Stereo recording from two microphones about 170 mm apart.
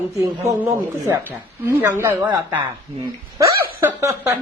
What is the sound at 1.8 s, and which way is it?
A woman's voice, 15° right (ahead or behind).